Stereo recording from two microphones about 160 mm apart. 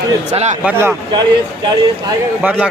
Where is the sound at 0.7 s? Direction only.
15° right (ahead or behind).